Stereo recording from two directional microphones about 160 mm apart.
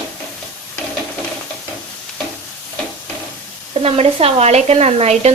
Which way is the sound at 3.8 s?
40° right (ahead or behind).